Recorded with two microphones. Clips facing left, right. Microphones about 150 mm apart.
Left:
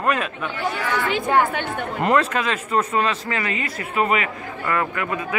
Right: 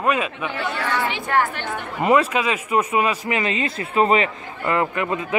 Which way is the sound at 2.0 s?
10° right (ahead or behind).